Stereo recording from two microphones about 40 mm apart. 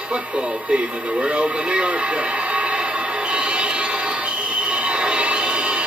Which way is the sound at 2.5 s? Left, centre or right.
Right.